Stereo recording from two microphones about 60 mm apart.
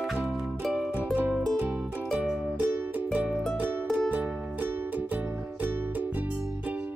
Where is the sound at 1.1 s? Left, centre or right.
Right.